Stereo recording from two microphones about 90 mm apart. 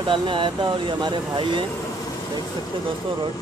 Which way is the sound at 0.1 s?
65° right (ahead or behind).